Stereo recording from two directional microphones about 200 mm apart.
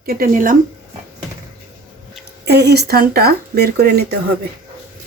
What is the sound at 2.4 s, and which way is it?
Speech, 55° right (ahead or behind).